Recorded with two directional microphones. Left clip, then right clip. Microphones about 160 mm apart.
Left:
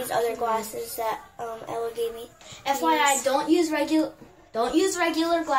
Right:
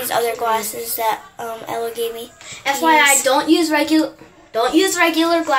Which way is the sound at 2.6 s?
30° right (ahead or behind).